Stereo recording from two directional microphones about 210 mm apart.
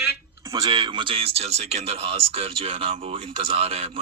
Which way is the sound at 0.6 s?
20° right (ahead or behind).